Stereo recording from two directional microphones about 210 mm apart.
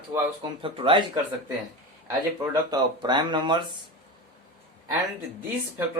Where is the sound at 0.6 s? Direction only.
25° right (ahead or behind).